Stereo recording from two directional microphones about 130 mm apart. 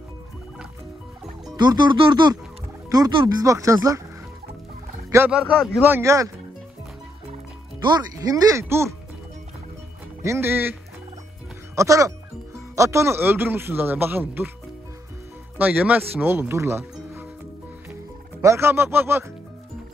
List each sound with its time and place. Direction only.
1.6 s speech: 35° right (ahead or behind)
5.3 s a man's voice: 5° right (ahead or behind)
5.9 s speech: 20° right (ahead or behind)
7.8 s speech: 30° right (ahead or behind)
10.2 s a man's voice: 20° right (ahead or behind)
15.5 s speech: 15° right (ahead or behind)
18.4 s a man's voice: 20° right (ahead or behind)